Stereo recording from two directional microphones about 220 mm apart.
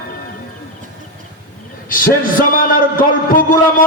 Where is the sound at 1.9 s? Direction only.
40° left (ahead or behind).